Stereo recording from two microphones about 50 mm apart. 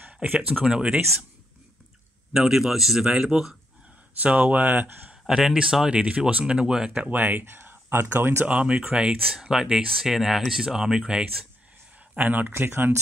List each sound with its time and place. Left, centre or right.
0.0 s a sound: right
0.7 s speech: centre
2.3 s speech: centre
4.2 s speech: right
5.3 s speech: centre
6.9 s speech: right
7.4 s speech: right
8.5 s speech: right
9.3 s speech: centre
12.2 s speech: right